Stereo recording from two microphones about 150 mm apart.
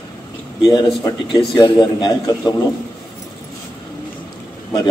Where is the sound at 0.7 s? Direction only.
30° left (ahead or behind).